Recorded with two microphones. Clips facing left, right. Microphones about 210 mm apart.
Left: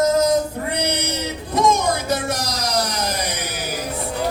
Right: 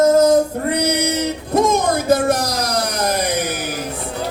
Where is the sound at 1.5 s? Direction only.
50° right (ahead or behind).